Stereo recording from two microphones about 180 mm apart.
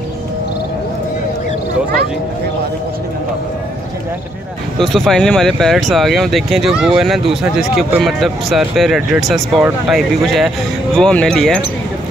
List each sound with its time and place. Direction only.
4.7 s speech: centre (ahead or behind)